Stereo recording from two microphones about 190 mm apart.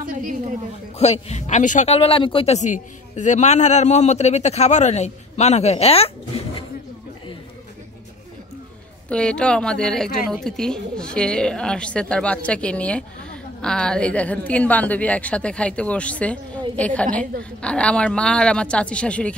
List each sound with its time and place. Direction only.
0.0 s a woman's voice: 45° right (ahead or behind)
1.0 s a man's voice: 35° left (ahead or behind)
9.1 s a woman's voice: 5° left (ahead or behind)